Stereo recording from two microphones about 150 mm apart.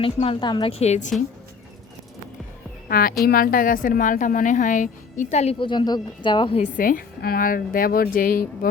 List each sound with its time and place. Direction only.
0.0 s speech: 40° left (ahead or behind)
0.7 s a woman's voice: 45° left (ahead or behind)
2.9 s a woman's voice: 75° left (ahead or behind); by 5.5 s 50° left (ahead or behind)
5.5 s speech: 30° left (ahead or behind)
6.6 s a woman's voice: 65° left (ahead or behind)